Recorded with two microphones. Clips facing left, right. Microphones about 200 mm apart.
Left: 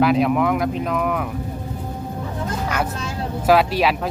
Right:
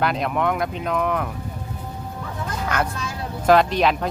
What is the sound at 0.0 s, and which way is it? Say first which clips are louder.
Speech: left 5 dB; 5° left (ahead or behind).